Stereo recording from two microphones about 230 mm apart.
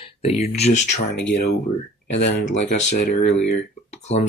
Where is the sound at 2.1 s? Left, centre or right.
Left.